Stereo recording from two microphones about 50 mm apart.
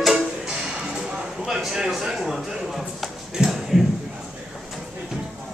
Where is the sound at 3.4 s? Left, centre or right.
Centre.